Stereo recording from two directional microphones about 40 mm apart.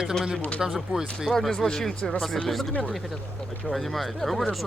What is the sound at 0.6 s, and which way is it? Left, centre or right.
Speech, centre.